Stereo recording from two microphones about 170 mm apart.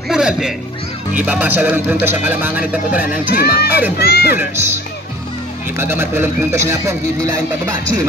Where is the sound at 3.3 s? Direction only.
65° left (ahead or behind).